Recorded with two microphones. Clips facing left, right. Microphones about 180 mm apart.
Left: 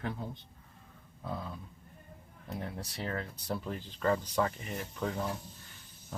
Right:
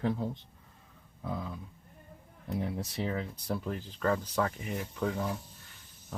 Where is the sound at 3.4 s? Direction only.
Centre (ahead or behind).